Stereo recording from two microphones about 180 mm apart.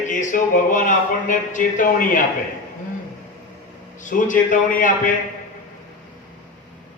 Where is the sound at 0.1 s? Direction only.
45° left (ahead or behind).